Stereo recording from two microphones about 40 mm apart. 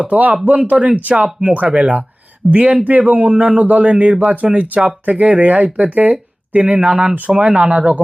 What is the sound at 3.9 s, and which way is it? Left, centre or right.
Speech, right.